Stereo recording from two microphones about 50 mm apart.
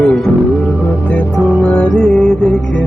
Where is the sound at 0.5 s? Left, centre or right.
Left.